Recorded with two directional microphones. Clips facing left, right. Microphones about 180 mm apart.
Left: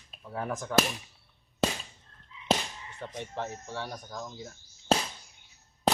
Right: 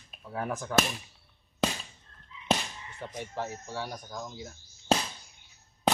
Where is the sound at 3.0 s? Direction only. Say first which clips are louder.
Even; 5° right (ahead or behind).